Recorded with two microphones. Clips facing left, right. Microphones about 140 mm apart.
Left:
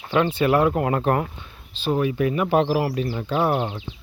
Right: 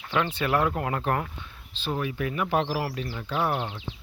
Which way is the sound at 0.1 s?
30° left (ahead or behind).